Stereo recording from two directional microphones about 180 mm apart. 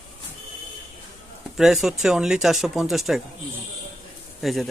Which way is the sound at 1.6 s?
Centre (ahead or behind).